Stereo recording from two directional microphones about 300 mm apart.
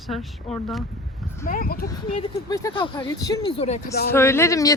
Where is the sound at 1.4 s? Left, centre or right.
Left.